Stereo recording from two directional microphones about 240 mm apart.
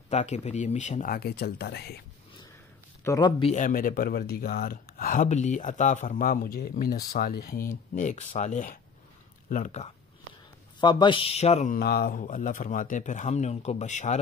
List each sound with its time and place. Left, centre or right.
0.1 s speech: left
3.0 s speech: centre; by 14.1 s left